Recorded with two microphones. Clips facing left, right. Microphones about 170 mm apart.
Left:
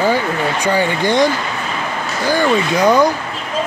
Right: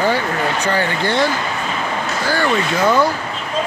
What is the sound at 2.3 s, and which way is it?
Speech, 15° left (ahead or behind).